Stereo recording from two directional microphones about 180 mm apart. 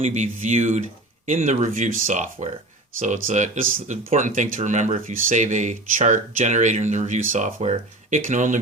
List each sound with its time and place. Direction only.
0.0 s speech: 40° right (ahead or behind)